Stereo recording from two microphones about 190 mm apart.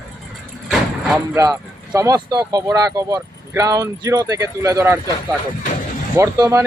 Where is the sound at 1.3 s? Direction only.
20° right (ahead or behind).